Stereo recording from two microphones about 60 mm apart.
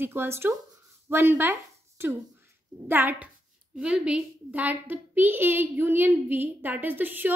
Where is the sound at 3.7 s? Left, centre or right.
Centre; by 7.3 s right.